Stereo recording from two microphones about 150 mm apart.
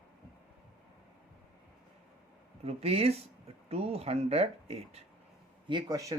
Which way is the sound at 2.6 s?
40° right (ahead or behind).